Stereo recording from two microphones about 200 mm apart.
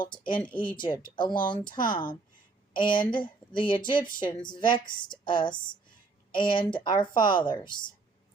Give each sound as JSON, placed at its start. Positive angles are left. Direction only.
{"t": 0.0, "sound": "a woman's voice", "side_deg": 25}